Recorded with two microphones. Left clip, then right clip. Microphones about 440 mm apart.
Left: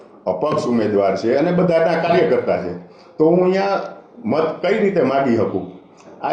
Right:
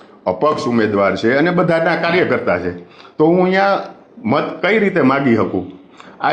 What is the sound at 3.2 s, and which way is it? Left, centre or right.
A man's voice, right.